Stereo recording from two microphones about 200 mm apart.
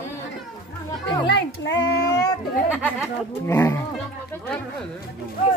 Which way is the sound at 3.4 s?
10° left (ahead or behind).